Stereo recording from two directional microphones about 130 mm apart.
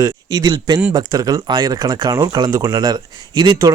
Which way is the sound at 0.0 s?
30° right (ahead or behind).